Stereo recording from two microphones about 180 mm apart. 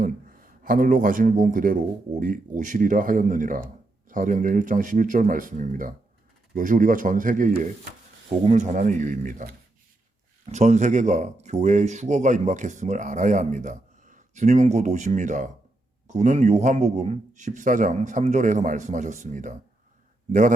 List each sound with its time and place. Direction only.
0.0 s a man's voice: 50° right (ahead or behind)